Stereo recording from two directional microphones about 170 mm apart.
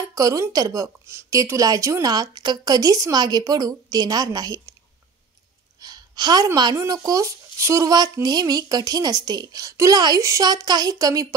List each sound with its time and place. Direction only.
0.1 s a woman's voice: 20° right (ahead or behind)
5.8 s a woman's voice: 25° right (ahead or behind)